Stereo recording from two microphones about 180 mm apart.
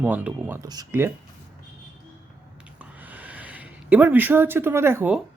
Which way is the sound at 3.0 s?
10° right (ahead or behind).